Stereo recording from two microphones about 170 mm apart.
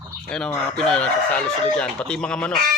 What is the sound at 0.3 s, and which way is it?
Chicken, 5° left (ahead or behind).